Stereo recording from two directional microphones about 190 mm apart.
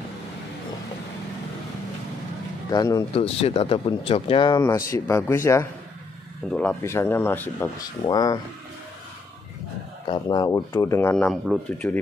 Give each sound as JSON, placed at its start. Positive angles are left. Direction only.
{"t": 2.7, "sound": "speech", "side_deg": 20}
{"t": 3.2, "sound": "speech", "side_deg": 30}
{"t": 10.0, "sound": "speech", "side_deg": 25}